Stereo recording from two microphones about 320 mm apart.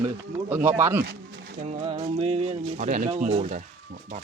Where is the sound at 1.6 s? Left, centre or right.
Centre.